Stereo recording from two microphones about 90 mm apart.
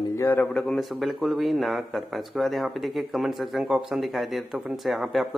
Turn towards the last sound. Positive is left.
turn(degrees=0)  # may be behind; listen again after turning